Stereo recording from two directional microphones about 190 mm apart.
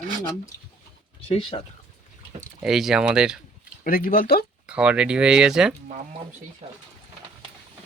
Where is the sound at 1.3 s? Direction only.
30° left (ahead or behind).